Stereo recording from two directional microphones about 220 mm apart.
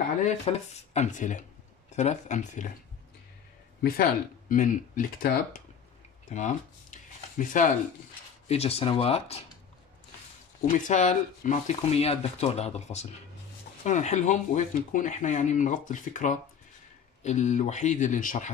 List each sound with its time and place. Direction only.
0.2 s speech: 30° left (ahead or behind)
3.8 s speech: 40° left (ahead or behind)
6.2 s a sound: 35° left (ahead or behind)
8.5 s speech: 25° left (ahead or behind)
10.6 s speech: 35° left (ahead or behind)